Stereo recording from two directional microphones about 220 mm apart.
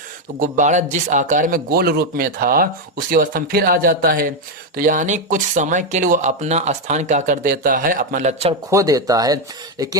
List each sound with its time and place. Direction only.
0.3 s speech: 35° right (ahead or behind)
8.7 s speech: 15° right (ahead or behind)